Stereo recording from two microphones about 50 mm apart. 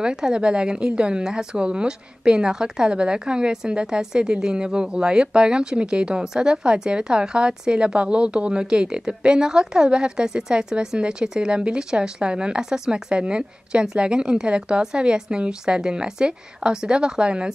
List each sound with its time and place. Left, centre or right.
0.0 s a woman's voice: centre